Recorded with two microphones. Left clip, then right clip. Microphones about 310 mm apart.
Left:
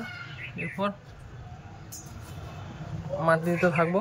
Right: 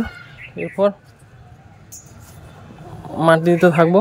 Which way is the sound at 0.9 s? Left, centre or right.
Centre.